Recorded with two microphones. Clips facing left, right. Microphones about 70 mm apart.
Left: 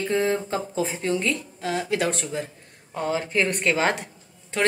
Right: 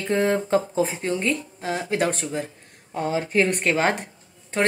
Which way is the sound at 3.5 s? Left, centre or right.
Right.